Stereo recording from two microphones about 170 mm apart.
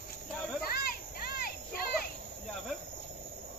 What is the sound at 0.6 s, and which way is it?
Children playing, 65° left (ahead or behind).